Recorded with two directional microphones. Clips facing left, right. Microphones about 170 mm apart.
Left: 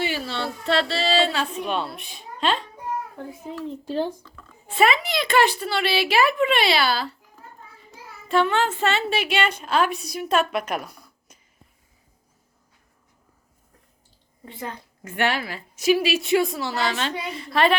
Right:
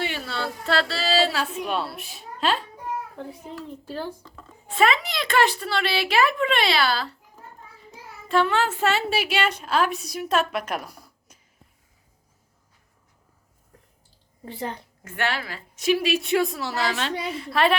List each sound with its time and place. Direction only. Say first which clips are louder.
0.0 s speech: left 2 dB; centre (ahead or behind)
3.7 s speech: left 7 dB; 20° left (ahead or behind)
4.8 s a woman's voice: left 1 dB; 5° left (ahead or behind)
8.3 s a woman's voice: left 1 dB; centre (ahead or behind)
11.3 s a sound: left 1 dB; 5° right (ahead or behind)
14.4 s a woman's voice: right 3 dB; 30° right (ahead or behind)
15.0 s a woman's voice: left 4 dB; 15° left (ahead or behind); by 17.7 s centre (ahead or behind)